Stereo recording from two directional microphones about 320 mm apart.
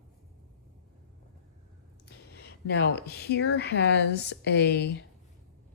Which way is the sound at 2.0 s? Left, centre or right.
Left.